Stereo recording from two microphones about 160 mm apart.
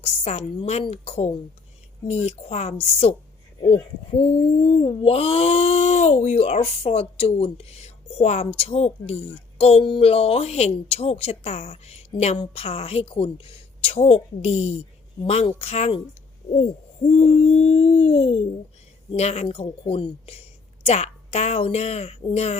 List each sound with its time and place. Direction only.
0.0 s speech: 40° left (ahead or behind)
17.1 s speech: 40° left (ahead or behind)